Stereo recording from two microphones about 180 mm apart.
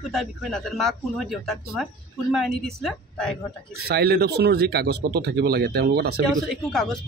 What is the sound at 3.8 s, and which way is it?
Speech, 65° right (ahead or behind).